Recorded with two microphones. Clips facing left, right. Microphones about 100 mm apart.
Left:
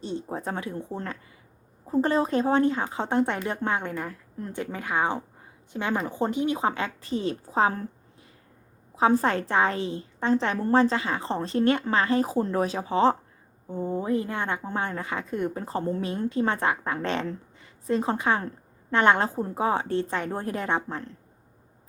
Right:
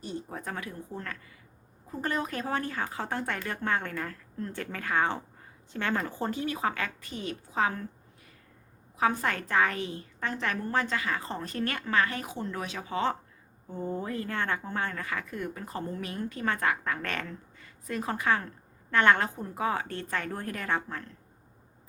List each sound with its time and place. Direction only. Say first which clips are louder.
0.0 s a woman's voice: left 6 dB; 25° left (ahead or behind)
9.0 s a woman's voice: left 6 dB; 25° left (ahead or behind)
13.7 s a woman's voice: left 6 dB; 15° left (ahead or behind)